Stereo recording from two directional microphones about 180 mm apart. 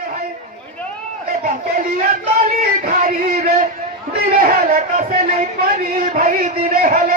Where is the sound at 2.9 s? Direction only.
45° right (ahead or behind).